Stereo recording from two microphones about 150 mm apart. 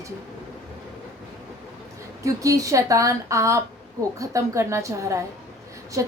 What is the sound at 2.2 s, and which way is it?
A woman's voice, 20° right (ahead or behind).